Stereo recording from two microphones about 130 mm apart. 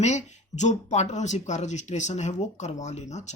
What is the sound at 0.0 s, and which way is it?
Speech, 65° left (ahead or behind).